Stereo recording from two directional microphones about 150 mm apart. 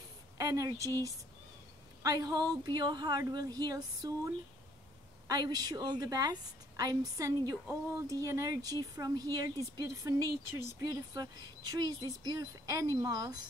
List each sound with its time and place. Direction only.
0.4 s a woman's voice: 20° right (ahead or behind)
5.3 s a woman's voice: 25° right (ahead or behind)